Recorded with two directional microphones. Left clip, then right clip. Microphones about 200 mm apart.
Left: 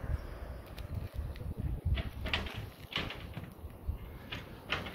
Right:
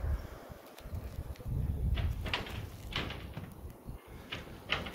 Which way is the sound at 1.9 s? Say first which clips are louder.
Left 1 dB; 50° left (ahead or behind).